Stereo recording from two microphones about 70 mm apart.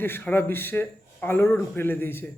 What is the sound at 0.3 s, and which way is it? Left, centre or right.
Speech, left.